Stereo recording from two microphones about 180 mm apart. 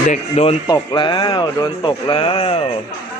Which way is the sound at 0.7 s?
25° left (ahead or behind).